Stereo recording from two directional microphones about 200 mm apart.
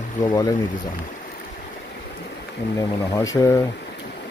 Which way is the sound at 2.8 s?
15° left (ahead or behind).